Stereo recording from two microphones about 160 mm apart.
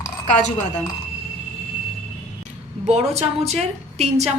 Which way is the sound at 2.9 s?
45° right (ahead or behind).